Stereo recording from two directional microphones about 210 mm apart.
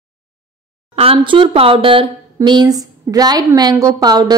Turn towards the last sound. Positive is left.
turn(degrees=-20)  # may be behind; listen again after turning